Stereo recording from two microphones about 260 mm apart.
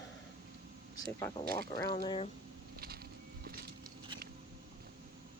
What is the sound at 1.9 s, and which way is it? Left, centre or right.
Speech, centre.